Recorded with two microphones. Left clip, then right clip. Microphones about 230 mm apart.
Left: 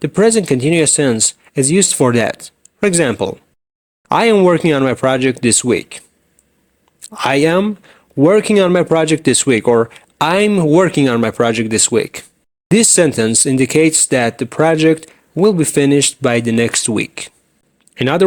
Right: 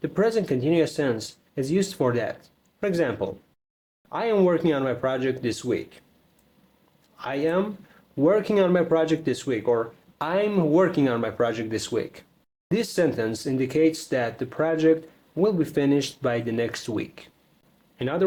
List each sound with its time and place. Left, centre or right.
0.0 s speech: left
7.0 s speech: left